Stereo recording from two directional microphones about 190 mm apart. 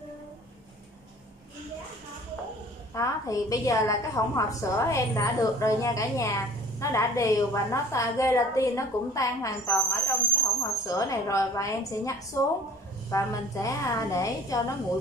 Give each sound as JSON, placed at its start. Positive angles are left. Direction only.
{"t": 2.9, "sound": "a woman's voice", "side_deg": 15}